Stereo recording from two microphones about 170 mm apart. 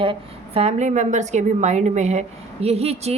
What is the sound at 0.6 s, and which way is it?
A woman's voice, 40° right (ahead or behind).